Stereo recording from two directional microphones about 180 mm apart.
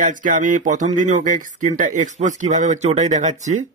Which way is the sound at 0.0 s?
45° right (ahead or behind).